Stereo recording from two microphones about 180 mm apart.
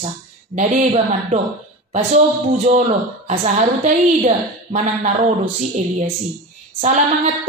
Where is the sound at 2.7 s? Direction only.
40° right (ahead or behind).